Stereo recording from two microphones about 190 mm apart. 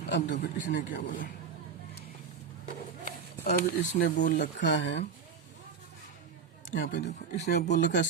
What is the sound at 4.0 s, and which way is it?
Speech, 45° left (ahead or behind).